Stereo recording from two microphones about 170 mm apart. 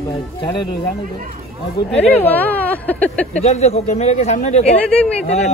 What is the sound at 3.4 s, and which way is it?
Speech, 40° left (ahead or behind).